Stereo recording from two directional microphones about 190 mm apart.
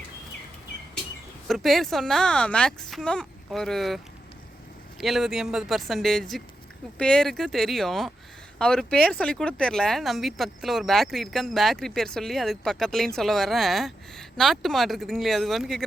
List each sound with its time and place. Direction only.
1.5 s speech: centre (ahead or behind)